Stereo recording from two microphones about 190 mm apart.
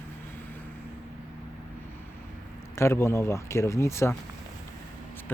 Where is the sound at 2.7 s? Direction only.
15° left (ahead or behind).